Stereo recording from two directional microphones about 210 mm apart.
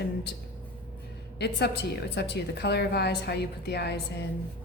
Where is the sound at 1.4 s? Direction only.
50° left (ahead or behind).